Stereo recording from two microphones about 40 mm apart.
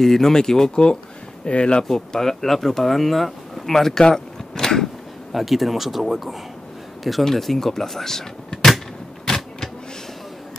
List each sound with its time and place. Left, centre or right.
0.0 s speech: centre
1.4 s speech: left
1.9 s speech: centre
4.1 s a sound: centre
5.3 s speech: centre
7.0 s a sound: centre